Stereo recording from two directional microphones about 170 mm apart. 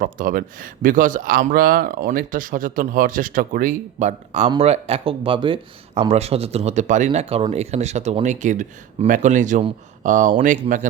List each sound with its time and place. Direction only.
0.0 s speech: 55° right (ahead or behind)